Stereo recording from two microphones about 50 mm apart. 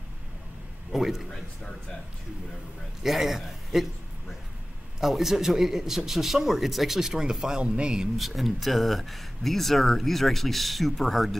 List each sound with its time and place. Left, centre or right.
0.9 s speech: centre
1.3 s speech: centre
3.0 s a man's voice: centre
5.0 s a man's voice: centre
8.2 s speech: centre